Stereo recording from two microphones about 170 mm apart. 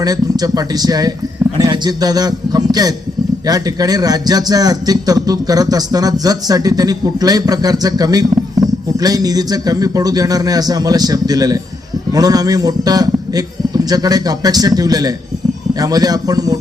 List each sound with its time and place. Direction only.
0.0 s a man's voice: 20° right (ahead or behind)